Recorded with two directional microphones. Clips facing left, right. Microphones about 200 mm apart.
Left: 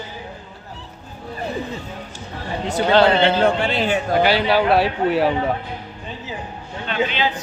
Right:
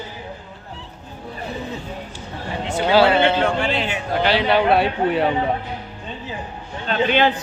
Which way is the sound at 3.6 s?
40° left (ahead or behind).